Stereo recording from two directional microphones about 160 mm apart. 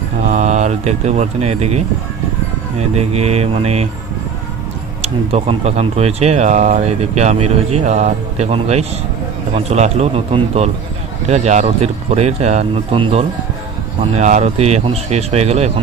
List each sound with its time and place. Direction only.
0.3 s speech: 45° right (ahead or behind)
5.0 s speech: 40° right (ahead or behind)